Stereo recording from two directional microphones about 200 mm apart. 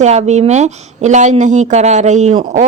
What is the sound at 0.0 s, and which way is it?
A woman's voice, 35° right (ahead or behind).